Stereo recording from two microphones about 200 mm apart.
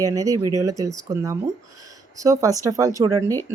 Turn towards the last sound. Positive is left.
turn(degrees=-15)  # may be behind; listen again after turning